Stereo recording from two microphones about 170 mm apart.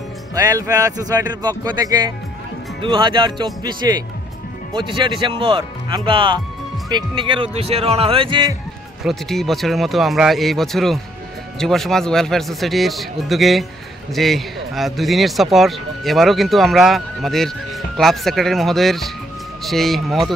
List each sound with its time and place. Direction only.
0.3 s speech: 20° right (ahead or behind)
9.0 s speech: centre (ahead or behind)